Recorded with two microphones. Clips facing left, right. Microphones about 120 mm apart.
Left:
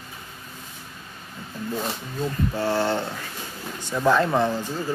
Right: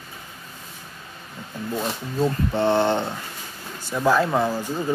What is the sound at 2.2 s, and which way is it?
Speech, 30° right (ahead or behind).